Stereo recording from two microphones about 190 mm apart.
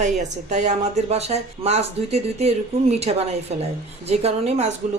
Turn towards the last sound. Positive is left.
turn(degrees=-35)  # may be behind; listen again after turning